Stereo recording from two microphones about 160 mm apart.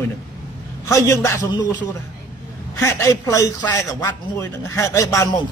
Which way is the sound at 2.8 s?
20° left (ahead or behind).